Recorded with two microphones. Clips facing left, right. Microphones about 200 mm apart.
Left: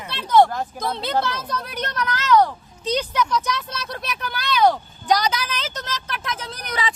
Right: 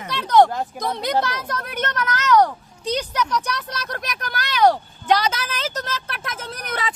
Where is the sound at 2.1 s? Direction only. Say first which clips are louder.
Even; 45° right (ahead or behind).